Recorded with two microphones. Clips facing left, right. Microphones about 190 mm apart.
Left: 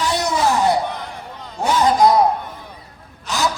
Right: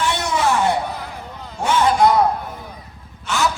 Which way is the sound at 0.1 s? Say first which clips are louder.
Left 1 dB; 35° left (ahead or behind).